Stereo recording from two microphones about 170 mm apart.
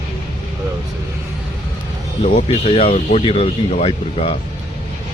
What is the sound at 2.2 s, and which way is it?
Speech, 35° left (ahead or behind).